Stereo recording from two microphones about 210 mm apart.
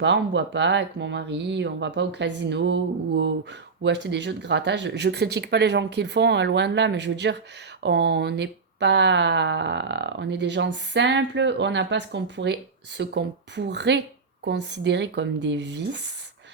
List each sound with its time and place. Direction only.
0.0 s speech: 55° right (ahead or behind)